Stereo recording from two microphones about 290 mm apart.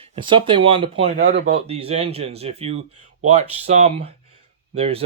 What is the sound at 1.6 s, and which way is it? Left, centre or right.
Speech, right.